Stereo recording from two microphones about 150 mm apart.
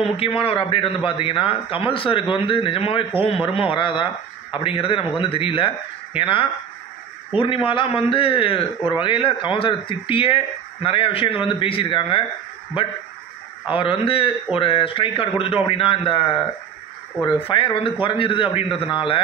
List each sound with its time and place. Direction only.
0.0 s speech: 35° left (ahead or behind)